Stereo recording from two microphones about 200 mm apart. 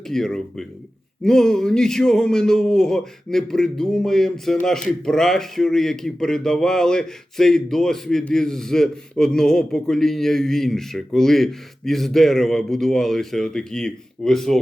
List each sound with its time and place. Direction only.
0.1 s a man's voice: 5° left (ahead or behind)